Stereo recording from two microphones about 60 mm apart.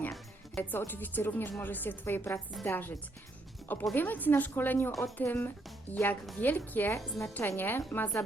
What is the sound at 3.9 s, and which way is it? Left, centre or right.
A woman's voice, left.